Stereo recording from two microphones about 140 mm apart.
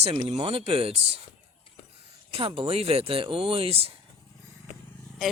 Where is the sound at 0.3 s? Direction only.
45° right (ahead or behind).